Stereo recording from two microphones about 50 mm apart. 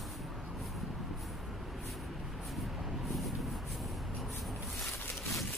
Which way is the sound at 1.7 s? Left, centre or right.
Centre.